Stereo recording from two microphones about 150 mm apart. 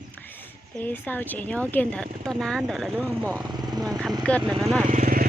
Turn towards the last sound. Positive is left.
turn(degrees=-70)  # may be behind; listen again after turning